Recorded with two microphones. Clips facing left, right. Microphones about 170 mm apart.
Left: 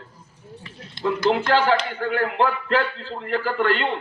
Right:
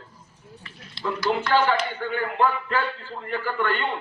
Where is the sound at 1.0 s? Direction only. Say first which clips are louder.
Left 5 dB; 50° left (ahead or behind).